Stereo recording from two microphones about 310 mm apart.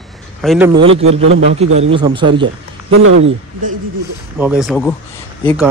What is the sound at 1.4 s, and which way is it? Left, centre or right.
Speech, right.